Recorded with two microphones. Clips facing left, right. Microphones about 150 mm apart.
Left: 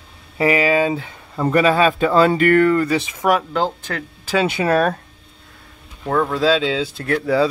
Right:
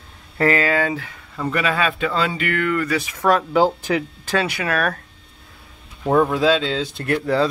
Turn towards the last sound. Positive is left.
turn(degrees=0)  # may be behind; listen again after turning